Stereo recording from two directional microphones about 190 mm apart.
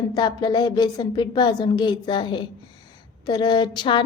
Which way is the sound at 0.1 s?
20° left (ahead or behind).